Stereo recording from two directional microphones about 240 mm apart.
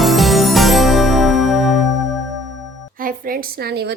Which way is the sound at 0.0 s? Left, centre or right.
Centre.